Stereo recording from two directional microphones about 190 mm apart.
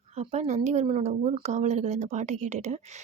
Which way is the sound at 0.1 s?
35° right (ahead or behind).